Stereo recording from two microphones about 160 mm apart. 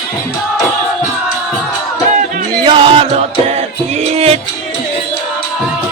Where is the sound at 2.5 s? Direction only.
30° right (ahead or behind).